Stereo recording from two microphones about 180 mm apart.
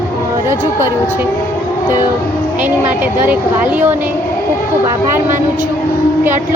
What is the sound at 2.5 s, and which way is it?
Speech, 10° right (ahead or behind).